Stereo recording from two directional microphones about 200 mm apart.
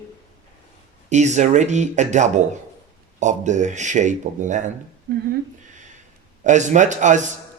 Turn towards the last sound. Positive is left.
turn(degrees=-35)  # may be behind; listen again after turning